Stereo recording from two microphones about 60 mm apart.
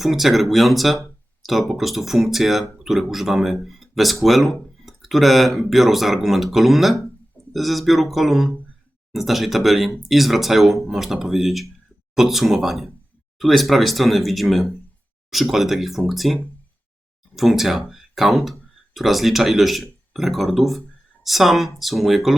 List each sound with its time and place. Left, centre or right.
0.0 s speech: centre